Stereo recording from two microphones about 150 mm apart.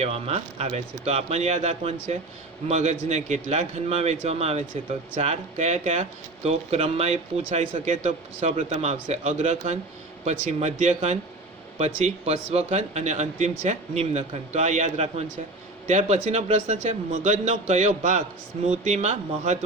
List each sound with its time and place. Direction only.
0.0 s speech: 45° right (ahead or behind)